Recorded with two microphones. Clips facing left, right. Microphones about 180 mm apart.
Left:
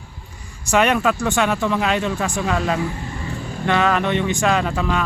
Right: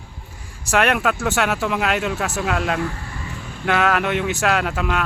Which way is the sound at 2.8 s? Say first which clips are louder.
Left 1 dB; 20° left (ahead or behind).